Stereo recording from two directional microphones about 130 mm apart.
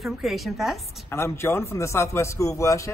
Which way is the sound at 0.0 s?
Centre (ahead or behind).